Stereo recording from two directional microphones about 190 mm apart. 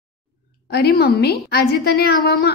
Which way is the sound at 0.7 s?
55° left (ahead or behind).